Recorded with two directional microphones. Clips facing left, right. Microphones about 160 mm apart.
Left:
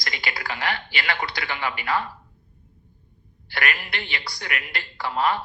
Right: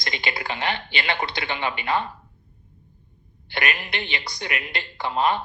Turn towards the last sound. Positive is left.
turn(degrees=-20)  # may be behind; listen again after turning